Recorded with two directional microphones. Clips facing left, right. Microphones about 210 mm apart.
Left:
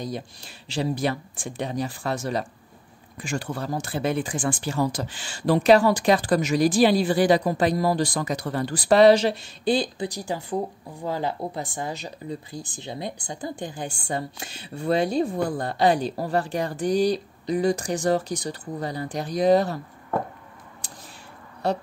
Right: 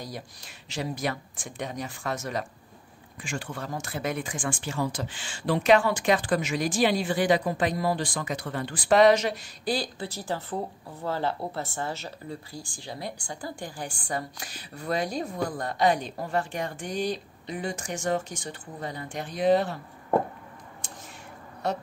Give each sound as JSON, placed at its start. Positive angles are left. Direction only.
{"t": 0.0, "sound": "speech", "side_deg": 25}
{"t": 20.8, "sound": "a sound", "side_deg": 35}
{"t": 21.6, "sound": "speech", "side_deg": 30}